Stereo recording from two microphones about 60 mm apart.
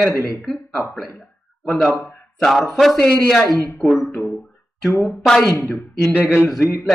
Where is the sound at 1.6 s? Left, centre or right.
Centre.